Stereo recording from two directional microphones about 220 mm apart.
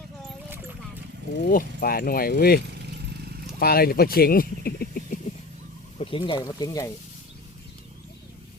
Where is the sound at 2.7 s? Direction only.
50° right (ahead or behind).